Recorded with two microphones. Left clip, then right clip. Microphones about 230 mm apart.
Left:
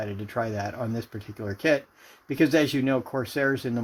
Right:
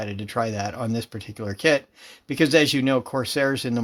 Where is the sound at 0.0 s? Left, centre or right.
Right.